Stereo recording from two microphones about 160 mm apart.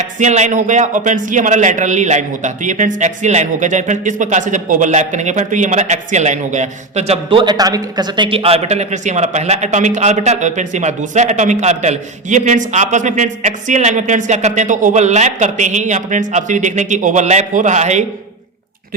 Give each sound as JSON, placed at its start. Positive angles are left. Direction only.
{"t": 0.0, "sound": "a man's voice", "side_deg": -50}